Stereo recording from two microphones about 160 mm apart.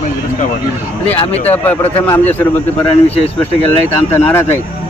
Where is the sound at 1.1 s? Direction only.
40° left (ahead or behind).